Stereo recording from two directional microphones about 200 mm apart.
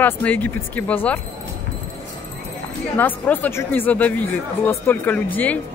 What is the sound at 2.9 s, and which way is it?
Speech, 10° left (ahead or behind).